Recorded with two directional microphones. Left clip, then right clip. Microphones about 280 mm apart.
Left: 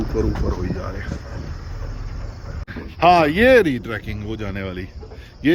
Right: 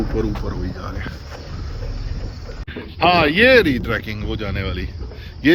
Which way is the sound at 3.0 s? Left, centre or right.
Centre.